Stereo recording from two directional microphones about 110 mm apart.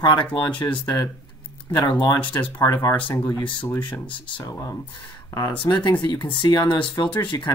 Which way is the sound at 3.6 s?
15° left (ahead or behind).